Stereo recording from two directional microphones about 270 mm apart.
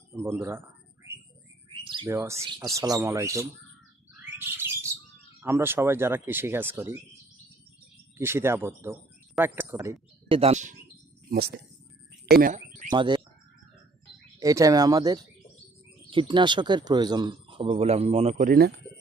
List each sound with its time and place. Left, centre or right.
0.1 s a sound: centre
1.7 s bird: centre
2.3 s speech: centre
5.4 s speech: centre
8.2 s speech: centre; by 11.5 s right
12.2 s a sound: right
12.9 s speech: centre
14.3 s speech: centre; by 18.7 s right